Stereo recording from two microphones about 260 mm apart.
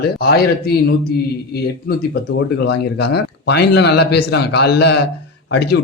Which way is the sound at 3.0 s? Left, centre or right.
Left.